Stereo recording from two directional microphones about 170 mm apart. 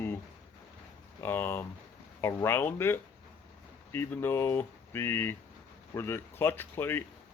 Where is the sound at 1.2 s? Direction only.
15° left (ahead or behind).